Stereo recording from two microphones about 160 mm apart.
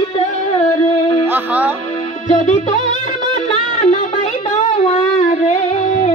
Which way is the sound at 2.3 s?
50° left (ahead or behind).